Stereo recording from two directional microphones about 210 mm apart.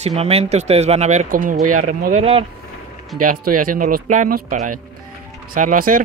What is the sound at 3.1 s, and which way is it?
Speech, 40° right (ahead or behind).